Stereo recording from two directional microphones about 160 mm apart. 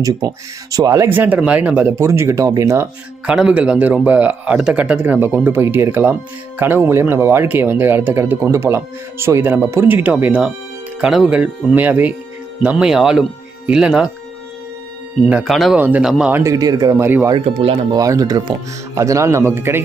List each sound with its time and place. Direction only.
0.0 s speech: 20° right (ahead or behind)
1.0 s speech: 10° right (ahead or behind)
3.3 s speech: 5° right (ahead or behind)
15.2 s speech: 5° right (ahead or behind)